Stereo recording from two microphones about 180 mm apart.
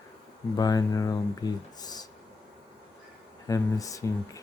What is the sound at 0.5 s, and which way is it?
Speech, 20° left (ahead or behind).